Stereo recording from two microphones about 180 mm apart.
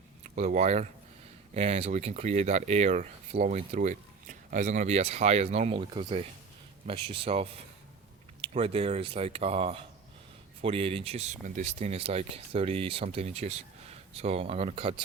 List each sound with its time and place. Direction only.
0.3 s speech: 40° right (ahead or behind)